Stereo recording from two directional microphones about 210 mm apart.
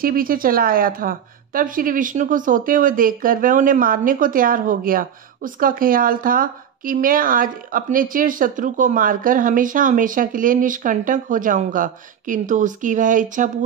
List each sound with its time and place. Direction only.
0.0 s a woman's voice: 45° right (ahead or behind)